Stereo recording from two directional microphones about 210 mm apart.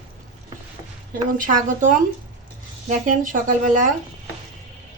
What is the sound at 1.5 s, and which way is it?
A woman's voice, 35° right (ahead or behind).